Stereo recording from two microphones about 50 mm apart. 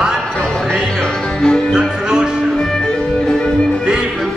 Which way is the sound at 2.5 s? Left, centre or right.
Centre.